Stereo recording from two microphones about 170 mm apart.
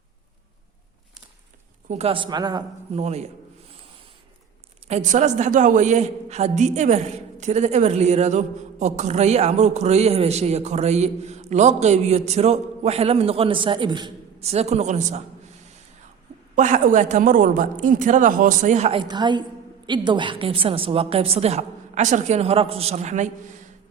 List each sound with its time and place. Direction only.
1.9 s a woman's voice: 35° right (ahead or behind)
2.9 s a man's voice: 40° right (ahead or behind)
4.9 s a man's voice: 45° right (ahead or behind); by 14.4 s 25° right (ahead or behind)
14.4 s a man's voice: 40° right (ahead or behind)
16.6 s a man's voice: 45° right (ahead or behind)